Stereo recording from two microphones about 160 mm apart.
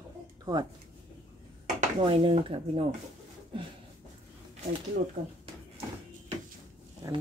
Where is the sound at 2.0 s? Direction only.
35° right (ahead or behind).